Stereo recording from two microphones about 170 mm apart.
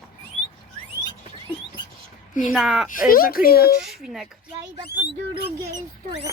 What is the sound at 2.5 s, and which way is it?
Speech, centre (ahead or behind).